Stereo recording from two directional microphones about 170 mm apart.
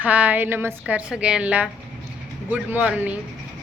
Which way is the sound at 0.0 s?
10° right (ahead or behind).